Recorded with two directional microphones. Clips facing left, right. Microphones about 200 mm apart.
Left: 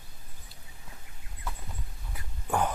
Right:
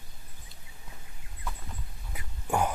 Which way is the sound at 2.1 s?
10° right (ahead or behind).